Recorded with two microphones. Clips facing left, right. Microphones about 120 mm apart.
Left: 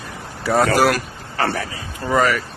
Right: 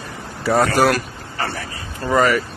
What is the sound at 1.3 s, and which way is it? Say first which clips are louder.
Speech: left 4 dB; 60° left (ahead or behind).